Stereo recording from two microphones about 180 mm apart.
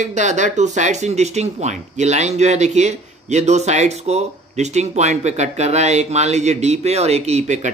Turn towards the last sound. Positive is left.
turn(degrees=-40)  # may be behind; listen again after turning